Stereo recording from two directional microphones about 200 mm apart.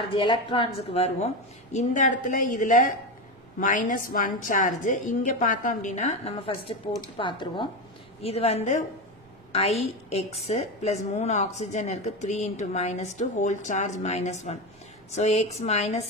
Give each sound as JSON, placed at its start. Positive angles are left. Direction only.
{"t": 0.1, "sound": "a woman's voice", "side_deg": 25}